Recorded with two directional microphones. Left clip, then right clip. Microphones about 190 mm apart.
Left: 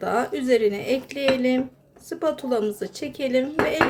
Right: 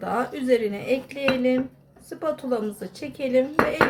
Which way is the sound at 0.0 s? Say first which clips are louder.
Left 2 dB; 25° left (ahead or behind).